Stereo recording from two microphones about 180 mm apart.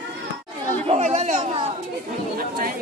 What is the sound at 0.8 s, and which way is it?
Chatter, 35° right (ahead or behind).